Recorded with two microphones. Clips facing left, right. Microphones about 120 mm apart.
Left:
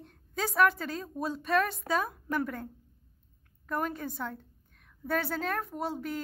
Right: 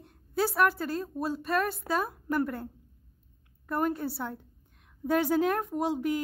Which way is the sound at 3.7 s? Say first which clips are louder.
Right 4 dB; 5° right (ahead or behind).